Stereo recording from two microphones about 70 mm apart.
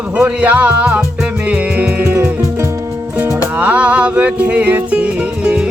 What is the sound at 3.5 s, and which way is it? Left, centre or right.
Music, right.